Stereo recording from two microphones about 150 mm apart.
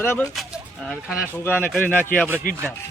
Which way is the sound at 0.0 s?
15° left (ahead or behind).